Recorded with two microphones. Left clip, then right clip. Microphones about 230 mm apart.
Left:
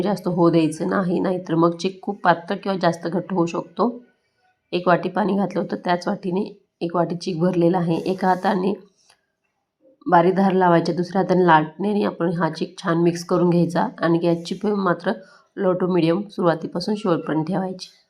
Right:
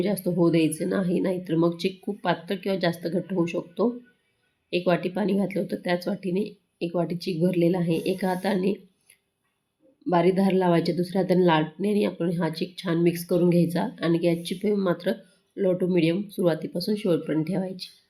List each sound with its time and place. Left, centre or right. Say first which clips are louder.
0.3 s speech: left 5 dB; centre
10.1 s speech: left 6 dB; centre